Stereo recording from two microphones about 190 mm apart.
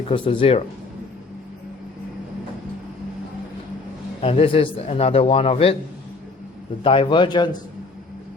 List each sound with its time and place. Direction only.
0.1 s a man's voice: 30° left (ahead or behind)
4.2 s a man's voice: 30° left (ahead or behind)
6.8 s a man's voice: 30° left (ahead or behind)